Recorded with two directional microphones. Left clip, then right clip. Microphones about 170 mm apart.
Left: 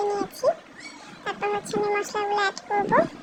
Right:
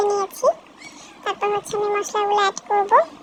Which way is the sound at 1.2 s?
20° right (ahead or behind).